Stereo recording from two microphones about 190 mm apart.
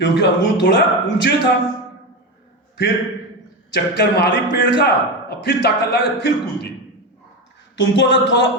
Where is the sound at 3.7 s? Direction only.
65° left (ahead or behind).